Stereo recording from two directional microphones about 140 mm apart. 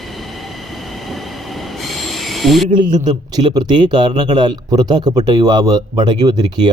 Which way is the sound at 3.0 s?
30° right (ahead or behind).